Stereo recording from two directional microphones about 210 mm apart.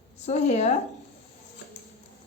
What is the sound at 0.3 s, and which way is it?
Speech, 30° left (ahead or behind).